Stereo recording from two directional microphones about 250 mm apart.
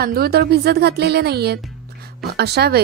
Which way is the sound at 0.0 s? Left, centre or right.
Right.